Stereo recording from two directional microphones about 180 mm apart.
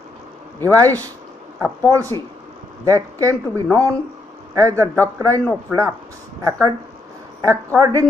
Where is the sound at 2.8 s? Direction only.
20° right (ahead or behind).